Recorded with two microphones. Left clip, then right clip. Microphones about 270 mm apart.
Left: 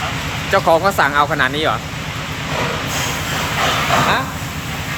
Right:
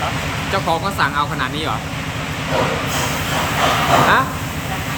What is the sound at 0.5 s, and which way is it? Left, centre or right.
Speech, centre.